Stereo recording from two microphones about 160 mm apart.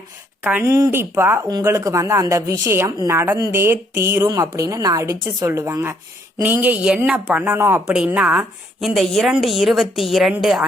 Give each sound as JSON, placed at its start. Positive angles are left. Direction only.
{"t": 0.4, "sound": "a woman's voice", "side_deg": -15}